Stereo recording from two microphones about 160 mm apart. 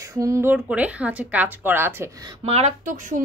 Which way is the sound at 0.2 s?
15° right (ahead or behind).